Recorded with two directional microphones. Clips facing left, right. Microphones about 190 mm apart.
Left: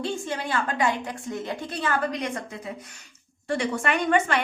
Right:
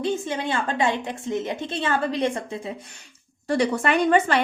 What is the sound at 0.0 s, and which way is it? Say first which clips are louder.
A woman's voice: right 4 dB; 20° right (ahead or behind).